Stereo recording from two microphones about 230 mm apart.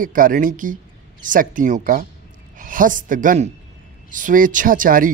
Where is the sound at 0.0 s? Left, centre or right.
Right.